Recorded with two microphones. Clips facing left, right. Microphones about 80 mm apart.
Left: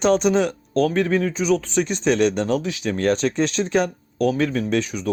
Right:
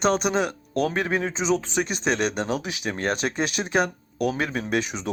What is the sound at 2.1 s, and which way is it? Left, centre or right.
Speech, right.